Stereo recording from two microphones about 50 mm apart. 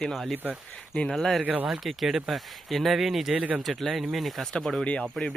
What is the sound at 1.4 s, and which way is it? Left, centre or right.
Speech, right.